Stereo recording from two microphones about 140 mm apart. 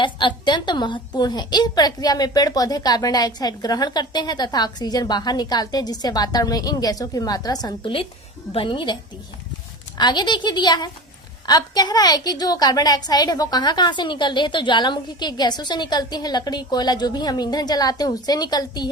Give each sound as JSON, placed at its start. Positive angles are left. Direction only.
{"t": 0.0, "sound": "a woman's voice", "side_deg": 35}
{"t": 10.0, "sound": "a woman's voice", "side_deg": 30}